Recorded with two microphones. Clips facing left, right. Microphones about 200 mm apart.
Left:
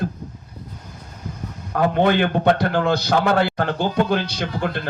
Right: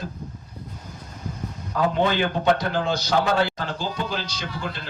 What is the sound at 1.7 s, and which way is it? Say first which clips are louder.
A man's voice: left 4 dB; 55° left (ahead or behind).